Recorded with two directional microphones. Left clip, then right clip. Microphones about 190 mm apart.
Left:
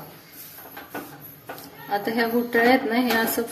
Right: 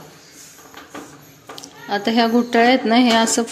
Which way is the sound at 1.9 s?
40° right (ahead or behind).